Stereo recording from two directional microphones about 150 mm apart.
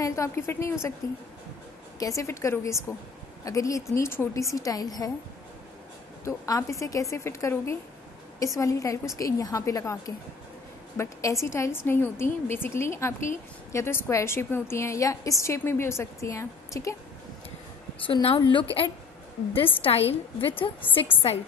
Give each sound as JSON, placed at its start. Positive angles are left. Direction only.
{"t": 0.0, "sound": "a woman's voice", "side_deg": 20}
{"t": 6.2, "sound": "a woman's voice", "side_deg": 20}
{"t": 18.0, "sound": "a woman's voice", "side_deg": 35}